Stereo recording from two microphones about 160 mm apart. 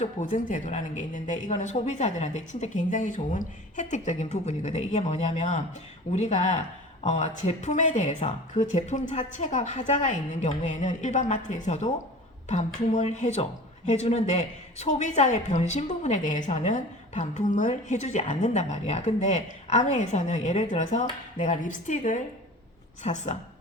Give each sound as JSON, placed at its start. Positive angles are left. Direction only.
{"t": 0.0, "sound": "speech", "side_deg": 50}